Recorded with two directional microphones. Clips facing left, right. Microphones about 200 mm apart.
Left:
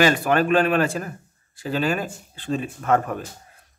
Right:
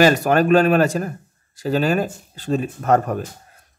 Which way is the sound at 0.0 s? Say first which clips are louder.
Right 4 dB; 40° right (ahead or behind).